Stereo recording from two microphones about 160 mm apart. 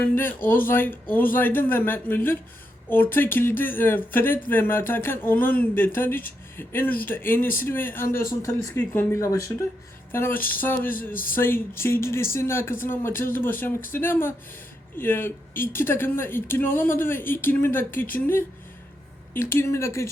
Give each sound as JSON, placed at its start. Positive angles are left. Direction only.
{"t": 0.0, "sound": "speech", "side_deg": 10}
{"t": 10.1, "sound": "a sound", "side_deg": 15}
{"t": 10.4, "sound": "speech", "side_deg": 10}